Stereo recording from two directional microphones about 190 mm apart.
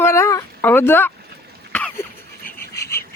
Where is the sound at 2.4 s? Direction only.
55° left (ahead or behind).